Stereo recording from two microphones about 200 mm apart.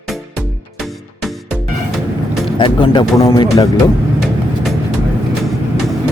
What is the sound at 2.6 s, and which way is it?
Speech, 25° left (ahead or behind).